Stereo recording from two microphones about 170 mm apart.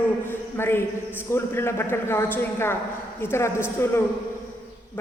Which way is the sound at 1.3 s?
15° left (ahead or behind).